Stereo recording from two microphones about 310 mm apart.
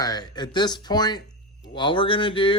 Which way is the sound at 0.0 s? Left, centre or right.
Centre.